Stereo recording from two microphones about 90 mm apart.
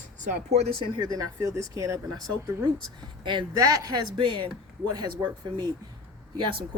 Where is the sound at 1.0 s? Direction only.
40° right (ahead or behind).